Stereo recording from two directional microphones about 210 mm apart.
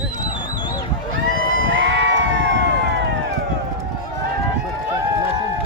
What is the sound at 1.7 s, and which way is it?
Crowd, 60° right (ahead or behind).